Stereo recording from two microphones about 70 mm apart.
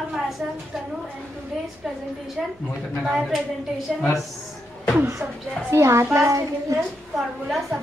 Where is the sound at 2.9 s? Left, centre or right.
Centre.